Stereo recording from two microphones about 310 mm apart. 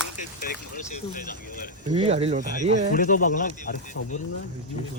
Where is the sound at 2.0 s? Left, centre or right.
Centre.